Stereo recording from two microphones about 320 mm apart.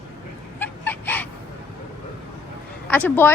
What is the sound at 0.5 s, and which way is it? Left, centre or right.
Fowl, centre.